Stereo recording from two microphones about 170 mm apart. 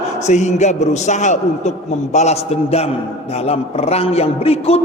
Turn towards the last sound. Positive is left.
turn(degrees=35)  # may be behind; listen again after turning